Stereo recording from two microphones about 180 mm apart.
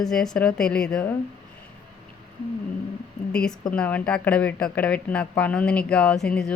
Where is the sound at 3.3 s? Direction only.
5° left (ahead or behind).